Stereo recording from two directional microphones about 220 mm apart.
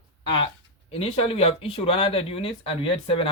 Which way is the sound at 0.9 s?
25° left (ahead or behind).